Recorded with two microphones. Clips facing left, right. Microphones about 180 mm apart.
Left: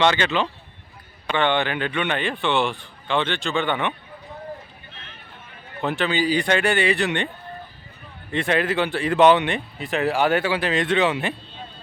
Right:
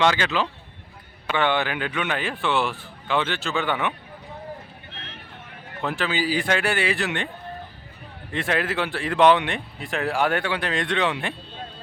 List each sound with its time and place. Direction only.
0.0 s speech: 5° right (ahead or behind)
5.8 s speech: centre (ahead or behind)
8.3 s speech: centre (ahead or behind)